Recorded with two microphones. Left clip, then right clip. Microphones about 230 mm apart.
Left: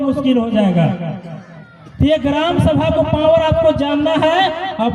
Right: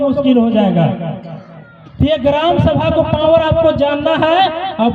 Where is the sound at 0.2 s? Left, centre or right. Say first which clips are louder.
Right 3 dB; right.